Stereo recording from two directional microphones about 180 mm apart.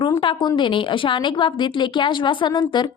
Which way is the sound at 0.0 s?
25° left (ahead or behind).